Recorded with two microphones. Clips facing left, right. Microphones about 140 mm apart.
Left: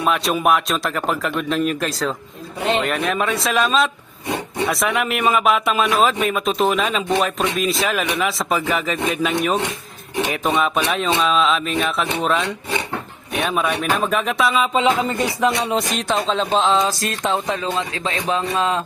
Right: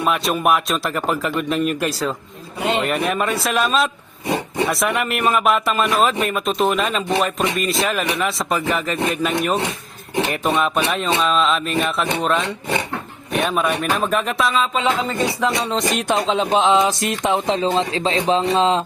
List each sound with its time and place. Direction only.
0.0 s speech: centre (ahead or behind)
14.7 s speech: 20° left (ahead or behind)
15.4 s speech: 10° left (ahead or behind)
15.9 s music: 10° right (ahead or behind)